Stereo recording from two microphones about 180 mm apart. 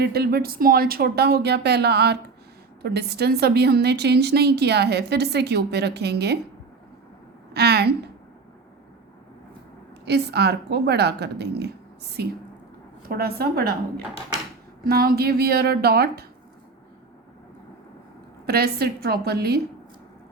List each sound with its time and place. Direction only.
0.0 s a woman's voice: 60° right (ahead or behind)
7.5 s a sound: 65° right (ahead or behind)
10.1 s a woman's voice: 65° right (ahead or behind)
18.4 s a woman's voice: 60° right (ahead or behind)